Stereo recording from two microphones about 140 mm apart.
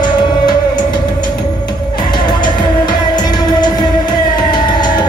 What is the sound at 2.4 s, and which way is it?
Music, 30° left (ahead or behind).